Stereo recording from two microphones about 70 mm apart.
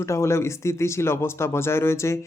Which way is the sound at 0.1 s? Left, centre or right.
Left.